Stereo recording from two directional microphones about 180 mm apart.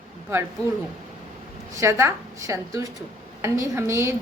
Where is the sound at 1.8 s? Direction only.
15° right (ahead or behind).